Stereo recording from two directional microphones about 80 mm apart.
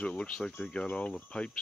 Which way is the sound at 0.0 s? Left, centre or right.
Centre.